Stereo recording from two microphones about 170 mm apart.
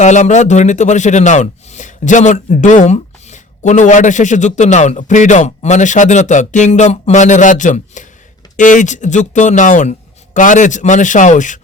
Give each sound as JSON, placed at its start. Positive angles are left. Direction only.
{"t": 0.0, "sound": "speech", "side_deg": 45}